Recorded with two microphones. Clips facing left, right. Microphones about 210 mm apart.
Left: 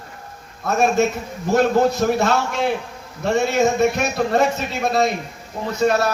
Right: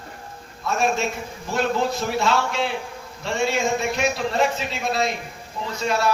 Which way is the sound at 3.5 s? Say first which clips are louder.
Left 6 dB; 40° left (ahead or behind).